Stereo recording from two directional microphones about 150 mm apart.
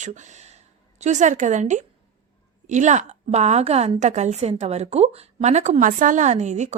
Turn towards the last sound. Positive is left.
turn(degrees=-50)  # may be behind; listen again after turning